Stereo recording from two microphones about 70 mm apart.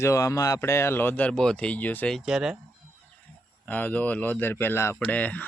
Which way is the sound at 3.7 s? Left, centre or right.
Left.